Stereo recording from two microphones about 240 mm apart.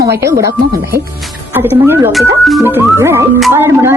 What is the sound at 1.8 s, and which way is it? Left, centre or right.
Speech, centre.